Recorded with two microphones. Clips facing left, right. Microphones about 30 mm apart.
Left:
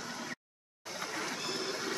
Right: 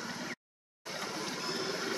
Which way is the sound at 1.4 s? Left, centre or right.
Centre.